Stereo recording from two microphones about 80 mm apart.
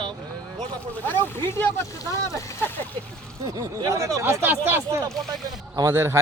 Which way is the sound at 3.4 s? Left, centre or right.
Right.